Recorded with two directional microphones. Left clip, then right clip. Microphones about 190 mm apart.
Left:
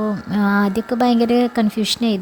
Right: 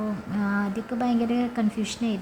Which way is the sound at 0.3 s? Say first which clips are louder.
Left 10 dB; 45° left (ahead or behind).